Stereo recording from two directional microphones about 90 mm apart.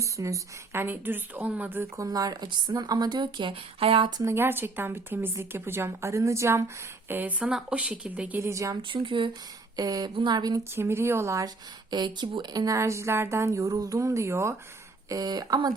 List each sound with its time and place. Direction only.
0.0 s speech: 35° right (ahead or behind)
0.8 s speech: 20° right (ahead or behind)
2.0 s speech: 40° right (ahead or behind); by 4.1 s 80° right
4.4 s speech: 25° right (ahead or behind)
7.1 s speech: 20° right (ahead or behind)
8.4 s speech: 35° right (ahead or behind)
8.9 s speech: 65° right (ahead or behind)
9.7 s speech: 45° right (ahead or behind)
10.6 s speech: 30° right (ahead or behind)
11.4 s speech: 55° right (ahead or behind)
12.6 s speech: 35° right (ahead or behind)
15.1 s speech: 45° right (ahead or behind)